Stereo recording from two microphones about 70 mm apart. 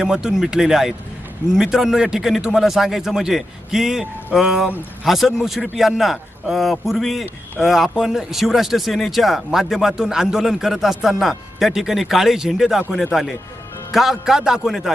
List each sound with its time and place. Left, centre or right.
0.0 s a man's voice: centre